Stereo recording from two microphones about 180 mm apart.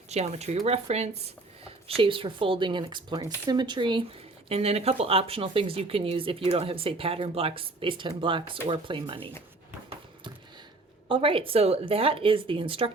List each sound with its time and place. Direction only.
0.1 s speech: 40° right (ahead or behind)
11.1 s speech: 30° right (ahead or behind)